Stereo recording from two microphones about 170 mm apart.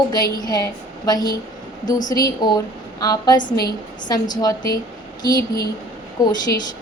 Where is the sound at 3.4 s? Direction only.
55° left (ahead or behind).